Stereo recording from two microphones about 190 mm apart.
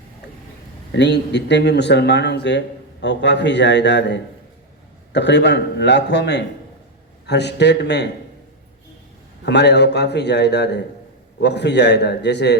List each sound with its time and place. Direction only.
0.9 s a man's voice: 65° left (ahead or behind)
9.5 s a man's voice: 65° left (ahead or behind)